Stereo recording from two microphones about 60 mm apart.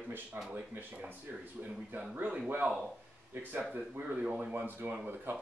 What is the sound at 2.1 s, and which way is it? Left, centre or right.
Speech, right.